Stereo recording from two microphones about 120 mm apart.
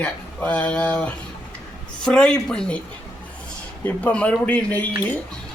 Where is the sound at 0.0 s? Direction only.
10° left (ahead or behind).